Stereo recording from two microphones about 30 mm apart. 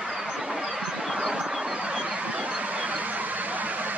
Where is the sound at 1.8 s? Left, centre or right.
Right.